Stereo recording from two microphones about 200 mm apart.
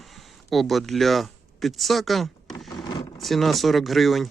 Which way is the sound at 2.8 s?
20° left (ahead or behind).